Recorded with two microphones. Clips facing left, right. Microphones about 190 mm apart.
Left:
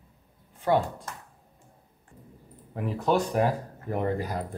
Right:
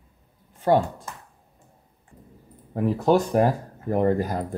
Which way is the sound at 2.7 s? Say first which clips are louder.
Right 6 dB; 40° right (ahead or behind).